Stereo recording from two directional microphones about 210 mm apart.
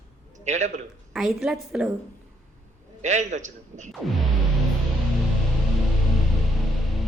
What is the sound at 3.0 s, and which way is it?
Speech, 35° right (ahead or behind).